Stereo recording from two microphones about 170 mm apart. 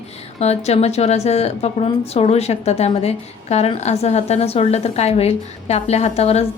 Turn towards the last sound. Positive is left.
turn(degrees=40)  # may be behind; listen again after turning